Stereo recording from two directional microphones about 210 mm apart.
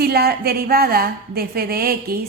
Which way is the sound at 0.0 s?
50° right (ahead or behind).